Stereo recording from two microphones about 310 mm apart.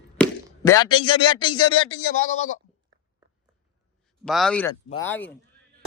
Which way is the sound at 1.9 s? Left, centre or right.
Left.